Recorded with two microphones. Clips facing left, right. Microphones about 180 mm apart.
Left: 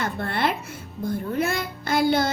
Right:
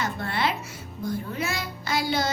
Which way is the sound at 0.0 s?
55° left (ahead or behind).